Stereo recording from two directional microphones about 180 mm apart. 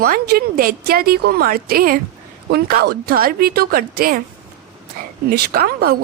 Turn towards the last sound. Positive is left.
turn(degrees=-55)  # may be behind; listen again after turning